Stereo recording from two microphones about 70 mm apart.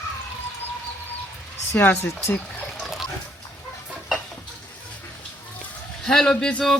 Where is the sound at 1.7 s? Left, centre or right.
Left.